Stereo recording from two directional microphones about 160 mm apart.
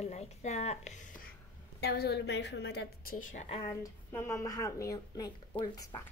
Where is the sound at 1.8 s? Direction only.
90° left.